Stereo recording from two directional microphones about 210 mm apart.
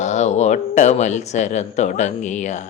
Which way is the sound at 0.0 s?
35° left (ahead or behind).